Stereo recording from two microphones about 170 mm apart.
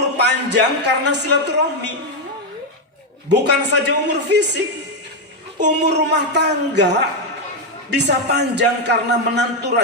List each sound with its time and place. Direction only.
0.2 s a man's voice: 90° right
3.2 s a man's voice: 80° right